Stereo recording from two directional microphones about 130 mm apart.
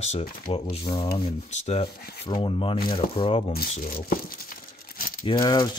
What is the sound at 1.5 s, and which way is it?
Rub, 55° left (ahead or behind).